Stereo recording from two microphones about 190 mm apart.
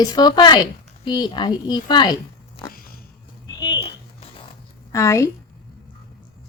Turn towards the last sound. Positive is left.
turn(degrees=15)  # may be behind; listen again after turning